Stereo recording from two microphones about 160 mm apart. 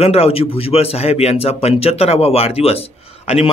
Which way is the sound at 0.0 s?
40° left (ahead or behind).